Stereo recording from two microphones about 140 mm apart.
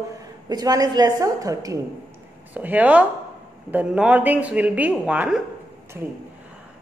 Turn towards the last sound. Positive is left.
turn(degrees=-10)  # may be behind; listen again after turning